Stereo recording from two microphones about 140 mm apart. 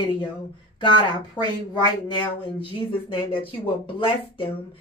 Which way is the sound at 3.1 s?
40° left (ahead or behind).